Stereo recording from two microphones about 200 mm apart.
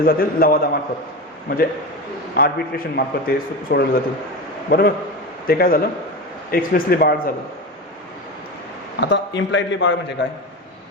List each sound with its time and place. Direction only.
0.0 s a man's voice: 45° left (ahead or behind)
5.5 s a man's voice: 50° left (ahead or behind)
9.0 s a man's voice: 60° left (ahead or behind)